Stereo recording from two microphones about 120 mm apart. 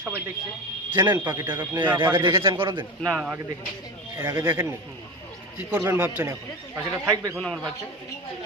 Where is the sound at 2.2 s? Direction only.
45° right (ahead or behind).